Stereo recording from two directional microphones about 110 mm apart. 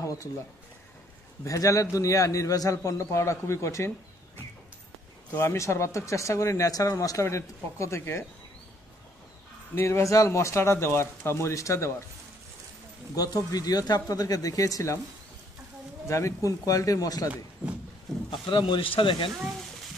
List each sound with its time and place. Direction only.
0.0 s a sound: 30° left (ahead or behind)
1.4 s speech: 30° left (ahead or behind)
5.3 s speech: 25° left (ahead or behind)
9.8 s speech: 25° left (ahead or behind)
13.1 s speech: 35° left (ahead or behind)
16.1 s speech: 25° left (ahead or behind)
17.6 s a sound: 10° right (ahead or behind)
18.3 s speech: 45° left (ahead or behind)